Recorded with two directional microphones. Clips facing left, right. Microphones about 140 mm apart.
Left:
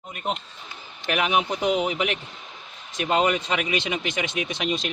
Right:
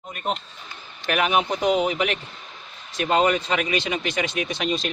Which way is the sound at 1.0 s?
20° left (ahead or behind).